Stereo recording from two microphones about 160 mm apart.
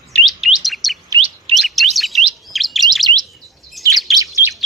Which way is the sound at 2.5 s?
Centre (ahead or behind).